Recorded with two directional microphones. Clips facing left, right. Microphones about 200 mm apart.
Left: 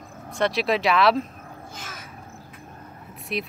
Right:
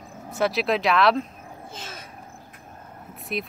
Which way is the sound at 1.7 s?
25° right (ahead or behind).